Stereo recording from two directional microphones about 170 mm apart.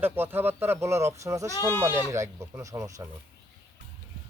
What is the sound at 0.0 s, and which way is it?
Speech, 10° right (ahead or behind).